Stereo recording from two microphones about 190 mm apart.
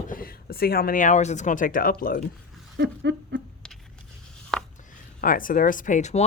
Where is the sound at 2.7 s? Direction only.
70° right (ahead or behind).